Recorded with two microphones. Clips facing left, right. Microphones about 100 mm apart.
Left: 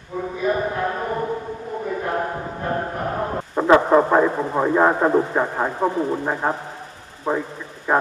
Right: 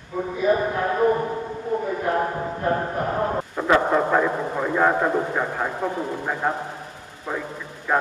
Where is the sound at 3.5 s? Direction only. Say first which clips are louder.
Left 6 dB; 25° left (ahead or behind).